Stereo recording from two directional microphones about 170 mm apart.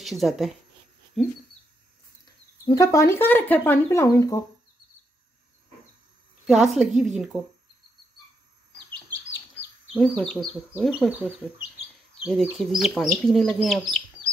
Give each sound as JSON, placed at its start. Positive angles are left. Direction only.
{"t": 0.0, "sound": "speech", "side_deg": 0}
{"t": 2.2, "sound": "speech", "side_deg": 20}
{"t": 6.4, "sound": "speech", "side_deg": 0}
{"t": 9.9, "sound": "speech", "side_deg": 5}
{"t": 10.8, "sound": "speech", "side_deg": -5}